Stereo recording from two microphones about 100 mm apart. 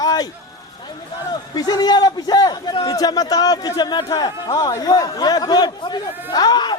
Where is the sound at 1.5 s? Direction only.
40° left (ahead or behind).